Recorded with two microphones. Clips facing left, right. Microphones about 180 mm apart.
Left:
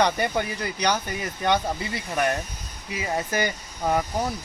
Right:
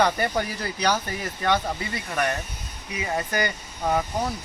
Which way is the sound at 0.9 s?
Centre (ahead or behind).